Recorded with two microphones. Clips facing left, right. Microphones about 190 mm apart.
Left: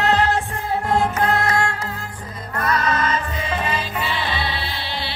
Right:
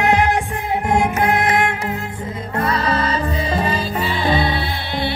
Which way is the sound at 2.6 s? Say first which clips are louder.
Right 1 dB; 30° right (ahead or behind).